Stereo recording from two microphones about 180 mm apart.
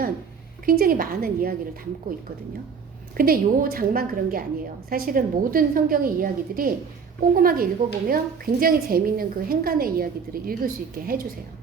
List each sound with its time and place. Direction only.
0.6 s a woman's voice: 50° right (ahead or behind)
3.2 s a woman's voice: 55° right (ahead or behind)